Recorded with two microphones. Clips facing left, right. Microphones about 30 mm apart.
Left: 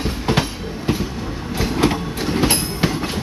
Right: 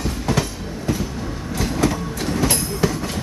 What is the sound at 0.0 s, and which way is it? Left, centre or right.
Train, left.